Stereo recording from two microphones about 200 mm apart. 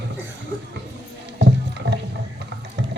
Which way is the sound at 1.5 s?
60° right (ahead or behind).